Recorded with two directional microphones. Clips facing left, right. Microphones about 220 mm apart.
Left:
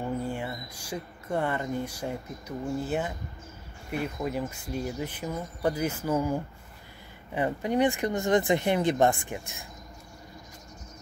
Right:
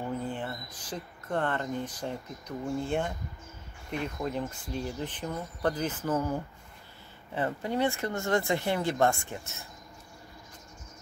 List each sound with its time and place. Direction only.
0.2 s speech: 10° left (ahead or behind)